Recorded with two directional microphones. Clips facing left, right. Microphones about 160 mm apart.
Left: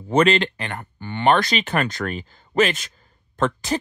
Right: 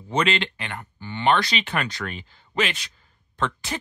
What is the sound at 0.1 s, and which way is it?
Speech, 45° left (ahead or behind).